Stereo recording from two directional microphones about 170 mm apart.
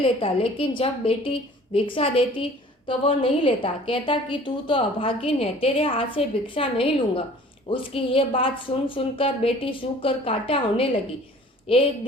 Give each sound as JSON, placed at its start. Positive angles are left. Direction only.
{"t": 0.0, "sound": "a woman's voice", "side_deg": 30}